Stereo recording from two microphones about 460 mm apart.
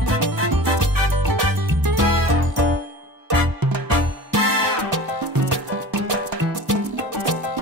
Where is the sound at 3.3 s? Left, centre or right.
Right.